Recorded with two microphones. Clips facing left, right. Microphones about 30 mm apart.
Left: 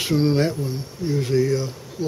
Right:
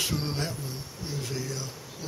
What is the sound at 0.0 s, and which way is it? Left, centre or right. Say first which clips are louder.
Speech: left 11 dB; left.